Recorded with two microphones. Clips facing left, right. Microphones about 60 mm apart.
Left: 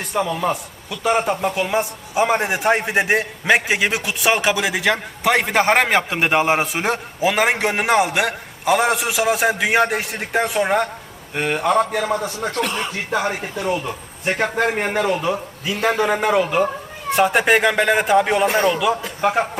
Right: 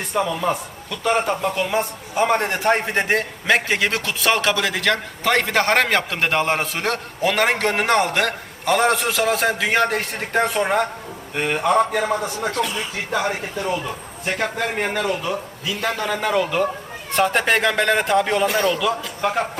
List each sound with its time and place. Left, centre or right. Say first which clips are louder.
0.1 s a man's voice: left 1 dB; centre
12.5 s speech: left 4 dB; left
13.1 s a man's voice: even; centre
13.7 s a man's voice: left 4 dB; centre
15.6 s a man's voice: left 6 dB; left; by 18.4 s centre
18.4 s a man's voice: left 2 dB; left